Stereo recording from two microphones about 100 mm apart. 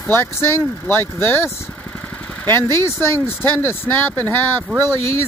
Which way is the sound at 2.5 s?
25° left (ahead or behind).